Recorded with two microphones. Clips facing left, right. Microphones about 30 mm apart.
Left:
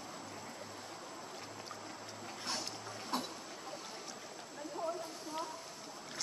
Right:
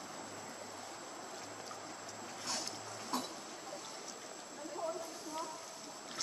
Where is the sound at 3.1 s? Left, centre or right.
Left.